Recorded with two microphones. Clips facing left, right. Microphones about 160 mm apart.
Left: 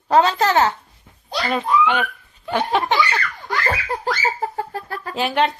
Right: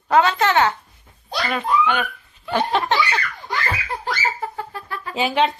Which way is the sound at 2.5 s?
15° left (ahead or behind).